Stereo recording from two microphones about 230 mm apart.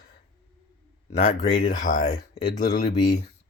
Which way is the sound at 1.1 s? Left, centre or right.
Left.